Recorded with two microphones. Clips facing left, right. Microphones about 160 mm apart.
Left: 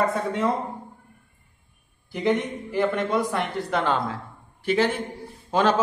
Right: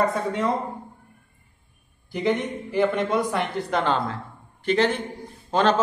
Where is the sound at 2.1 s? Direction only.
Centre (ahead or behind).